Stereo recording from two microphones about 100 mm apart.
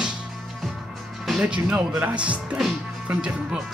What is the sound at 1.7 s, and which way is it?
Speech, 5° right (ahead or behind).